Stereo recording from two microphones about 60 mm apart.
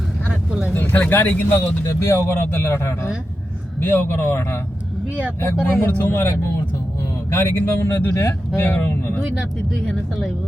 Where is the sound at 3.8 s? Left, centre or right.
Left.